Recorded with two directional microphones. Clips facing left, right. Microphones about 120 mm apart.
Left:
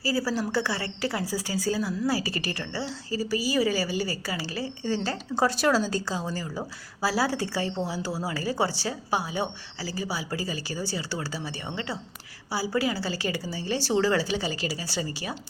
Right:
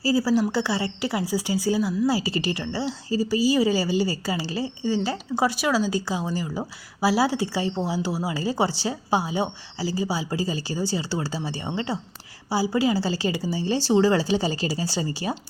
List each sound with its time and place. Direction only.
0.0 s a woman's voice: 20° right (ahead or behind)